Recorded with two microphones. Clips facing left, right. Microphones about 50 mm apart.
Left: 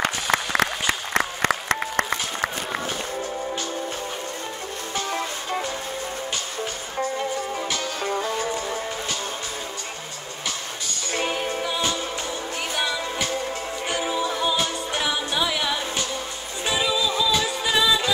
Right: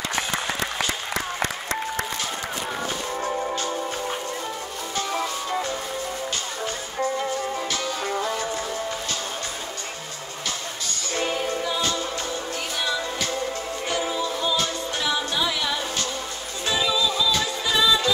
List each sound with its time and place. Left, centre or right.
0.0 s applause: left
11.1 s music: left
13.8 s music: centre
16.6 s music: centre